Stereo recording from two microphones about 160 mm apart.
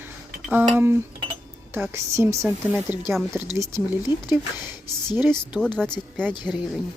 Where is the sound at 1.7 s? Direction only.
15° right (ahead or behind).